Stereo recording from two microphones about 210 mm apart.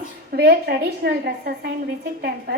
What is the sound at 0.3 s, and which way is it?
A woman's voice, 50° right (ahead or behind).